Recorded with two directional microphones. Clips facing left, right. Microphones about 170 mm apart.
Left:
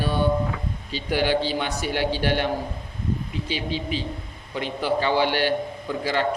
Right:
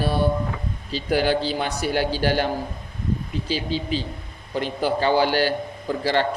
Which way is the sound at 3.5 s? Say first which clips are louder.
Right 3 dB; 35° right (ahead or behind).